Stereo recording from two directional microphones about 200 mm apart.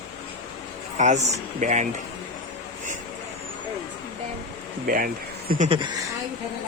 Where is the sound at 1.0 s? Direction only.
35° right (ahead or behind).